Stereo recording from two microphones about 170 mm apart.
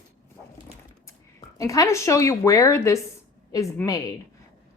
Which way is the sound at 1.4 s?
20° left (ahead or behind).